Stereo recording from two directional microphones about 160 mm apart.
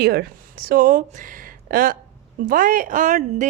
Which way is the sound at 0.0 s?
80° right.